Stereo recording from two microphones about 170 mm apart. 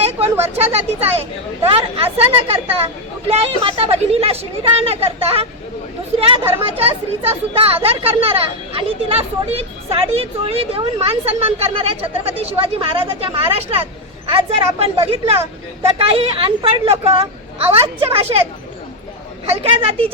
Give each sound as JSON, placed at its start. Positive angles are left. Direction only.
{"t": 0.0, "sound": "speech", "side_deg": -35}
{"t": 19.7, "sound": "speech", "side_deg": -35}